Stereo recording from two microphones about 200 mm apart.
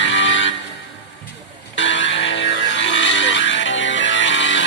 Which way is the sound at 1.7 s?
65° left (ahead or behind).